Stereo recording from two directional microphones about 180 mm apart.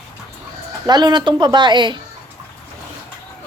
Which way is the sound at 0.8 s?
25° right (ahead or behind).